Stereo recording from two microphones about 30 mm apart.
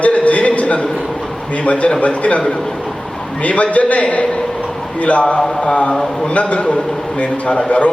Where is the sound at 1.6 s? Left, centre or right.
Left.